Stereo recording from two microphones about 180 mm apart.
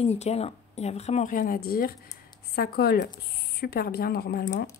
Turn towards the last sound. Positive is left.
turn(degrees=45)  # may be behind; listen again after turning